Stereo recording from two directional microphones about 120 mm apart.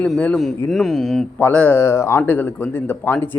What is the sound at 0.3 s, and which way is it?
Speech, centre (ahead or behind).